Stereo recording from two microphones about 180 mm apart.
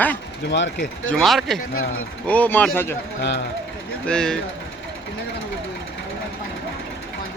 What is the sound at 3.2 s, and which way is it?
Speech, 80° left.